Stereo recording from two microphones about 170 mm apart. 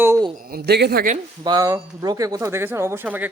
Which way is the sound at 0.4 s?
65° right (ahead or behind).